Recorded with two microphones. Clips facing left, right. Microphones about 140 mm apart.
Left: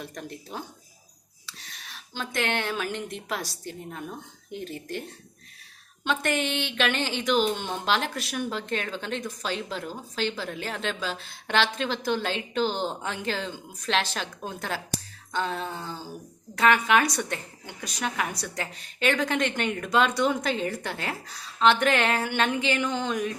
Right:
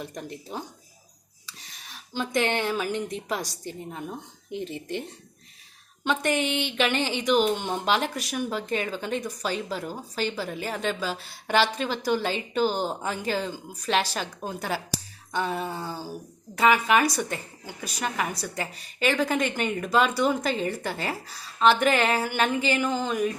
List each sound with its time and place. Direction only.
0.0 s speech: 15° right (ahead or behind)
1.5 s a sound: 15° right (ahead or behind)
3.2 s speech: 15° right (ahead or behind)
6.1 s a woman's voice: 15° right (ahead or behind)